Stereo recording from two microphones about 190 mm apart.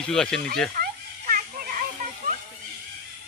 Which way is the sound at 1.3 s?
50° right (ahead or behind).